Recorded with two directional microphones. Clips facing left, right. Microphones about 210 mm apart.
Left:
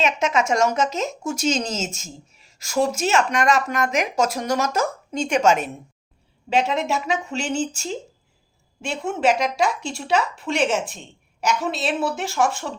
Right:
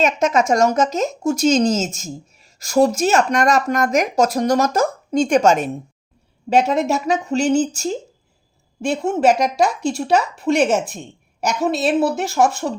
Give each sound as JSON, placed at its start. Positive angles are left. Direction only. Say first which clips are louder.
{"t": 0.0, "sound": "speech", "louder": "right 4 dB", "side_deg": -40}